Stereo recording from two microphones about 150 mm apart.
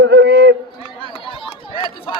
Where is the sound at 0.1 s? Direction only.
90° right.